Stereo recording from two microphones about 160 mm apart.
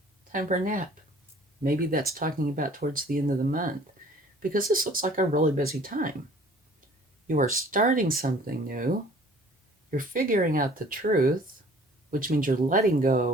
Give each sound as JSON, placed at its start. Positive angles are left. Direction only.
{"t": 0.3, "sound": "speech", "side_deg": -55}
{"t": 7.3, "sound": "speech", "side_deg": -55}